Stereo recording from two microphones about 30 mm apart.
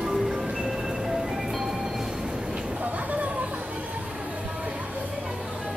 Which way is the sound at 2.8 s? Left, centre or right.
Right.